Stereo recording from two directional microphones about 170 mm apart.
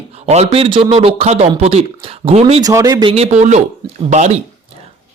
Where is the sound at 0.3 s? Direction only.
35° right (ahead or behind).